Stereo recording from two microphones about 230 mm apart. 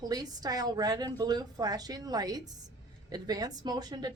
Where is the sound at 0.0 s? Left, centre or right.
Centre.